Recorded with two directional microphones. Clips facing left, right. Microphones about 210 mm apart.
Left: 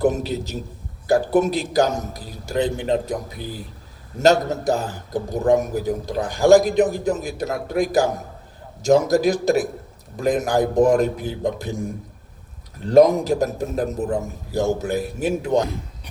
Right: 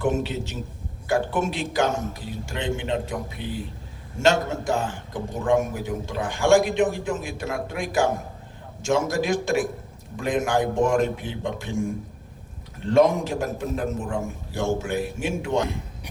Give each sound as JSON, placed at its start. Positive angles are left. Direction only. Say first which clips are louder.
{"t": 0.0, "sound": "a man's voice", "louder": "left 4 dB", "side_deg": 40}